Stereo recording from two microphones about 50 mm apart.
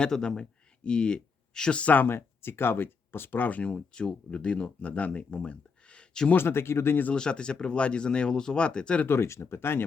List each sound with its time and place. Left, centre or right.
0.0 s speech: centre
1.8 s speech: left
2.0 s speech: left
3.6 s speech: centre
6.3 s speech: left
7.1 s speech: centre
9.0 s speech: left